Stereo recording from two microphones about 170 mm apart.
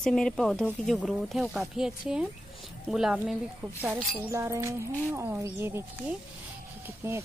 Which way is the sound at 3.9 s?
15° right (ahead or behind).